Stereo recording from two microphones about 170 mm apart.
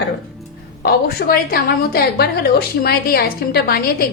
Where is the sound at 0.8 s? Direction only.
65° left (ahead or behind).